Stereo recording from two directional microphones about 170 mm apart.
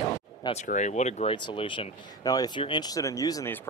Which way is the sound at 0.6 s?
45° left (ahead or behind).